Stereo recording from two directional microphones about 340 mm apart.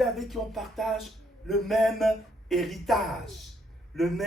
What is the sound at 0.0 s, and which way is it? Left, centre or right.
A man's voice, centre.